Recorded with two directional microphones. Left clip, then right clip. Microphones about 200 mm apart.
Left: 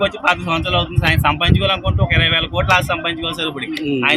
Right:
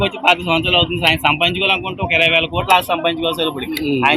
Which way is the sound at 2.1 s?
65° left (ahead or behind).